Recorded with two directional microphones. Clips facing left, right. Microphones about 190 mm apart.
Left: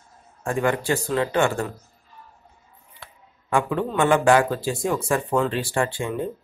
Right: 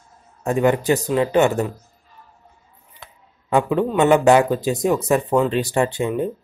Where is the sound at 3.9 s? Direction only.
20° right (ahead or behind).